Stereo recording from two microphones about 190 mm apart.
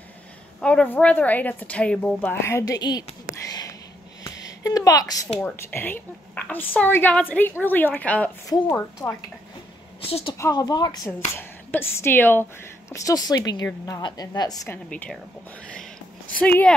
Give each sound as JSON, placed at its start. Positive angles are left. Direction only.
{"t": 0.6, "sound": "a woman's voice", "side_deg": 5}
{"t": 3.4, "sound": "whispering", "side_deg": 20}
{"t": 4.2, "sound": "a sound", "side_deg": 20}
{"t": 5.4, "sound": "a woman's voice", "side_deg": 10}
{"t": 10.0, "sound": "a woman's voice", "side_deg": 30}
{"t": 10.3, "sound": "a woman's voice", "side_deg": 15}
{"t": 14.9, "sound": "a woman's voice", "side_deg": 5}
{"t": 16.3, "sound": "a woman's voice", "side_deg": 10}